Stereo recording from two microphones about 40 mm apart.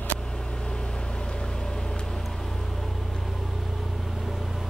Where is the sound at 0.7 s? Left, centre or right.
Left.